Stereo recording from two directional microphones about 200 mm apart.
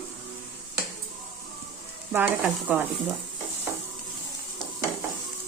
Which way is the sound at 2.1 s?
10° right (ahead or behind).